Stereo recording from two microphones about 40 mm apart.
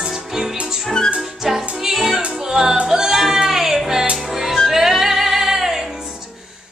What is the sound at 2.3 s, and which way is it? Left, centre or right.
Music, centre.